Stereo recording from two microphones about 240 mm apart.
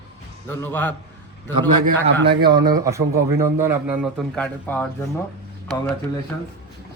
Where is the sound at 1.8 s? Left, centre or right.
Right.